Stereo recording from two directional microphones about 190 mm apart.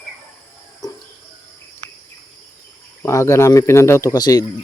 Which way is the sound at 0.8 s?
20° left (ahead or behind).